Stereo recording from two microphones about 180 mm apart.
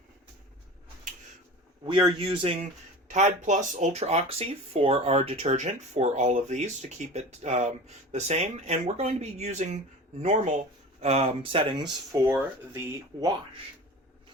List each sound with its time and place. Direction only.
1.8 s speech: 25° right (ahead or behind)
3.1 s speech: 40° right (ahead or behind); by 12.2 s 25° right (ahead or behind)
12.2 s speech: 15° right (ahead or behind)